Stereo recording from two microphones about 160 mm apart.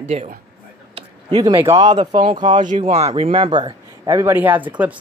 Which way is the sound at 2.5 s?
50° right (ahead or behind).